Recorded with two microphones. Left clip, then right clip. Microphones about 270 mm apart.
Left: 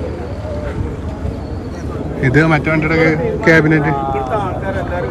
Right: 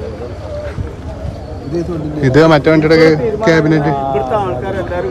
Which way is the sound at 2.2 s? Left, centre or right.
Centre.